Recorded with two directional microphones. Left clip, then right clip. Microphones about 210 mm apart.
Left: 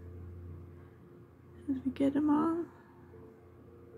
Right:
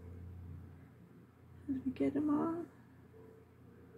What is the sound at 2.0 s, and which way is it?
Speech, 35° left (ahead or behind).